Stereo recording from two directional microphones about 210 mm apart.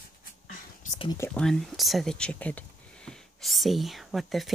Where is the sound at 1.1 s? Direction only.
10° left (ahead or behind).